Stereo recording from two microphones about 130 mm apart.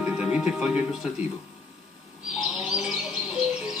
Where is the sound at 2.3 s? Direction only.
5° right (ahead or behind).